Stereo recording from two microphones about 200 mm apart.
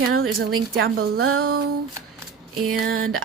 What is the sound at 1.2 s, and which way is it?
Speech, 90° right.